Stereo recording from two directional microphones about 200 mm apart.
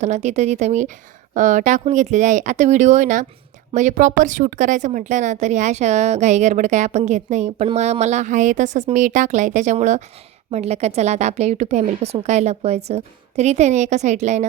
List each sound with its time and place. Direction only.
0.0 s a woman's voice: 35° right (ahead or behind)